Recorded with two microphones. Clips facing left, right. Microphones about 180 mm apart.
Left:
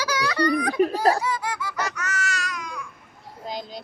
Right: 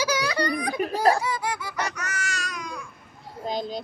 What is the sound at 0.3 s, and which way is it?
Baby laughter, 15° right (ahead or behind).